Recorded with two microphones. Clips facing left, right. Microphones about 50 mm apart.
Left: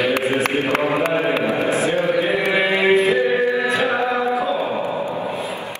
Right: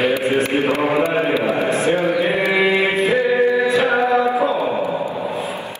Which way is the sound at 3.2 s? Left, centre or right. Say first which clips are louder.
Right 2 dB; left.